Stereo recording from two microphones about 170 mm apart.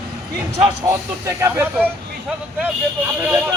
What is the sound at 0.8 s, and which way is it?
Speech, 15° right (ahead or behind).